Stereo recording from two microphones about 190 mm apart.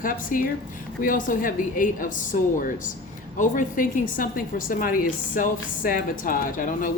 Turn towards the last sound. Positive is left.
turn(degrees=45)  # may be behind; listen again after turning